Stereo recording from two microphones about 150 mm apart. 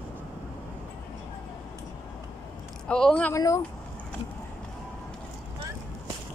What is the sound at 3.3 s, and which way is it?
Speech, 20° left (ahead or behind).